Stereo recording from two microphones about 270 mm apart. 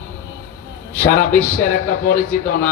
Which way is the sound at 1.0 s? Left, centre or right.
Left.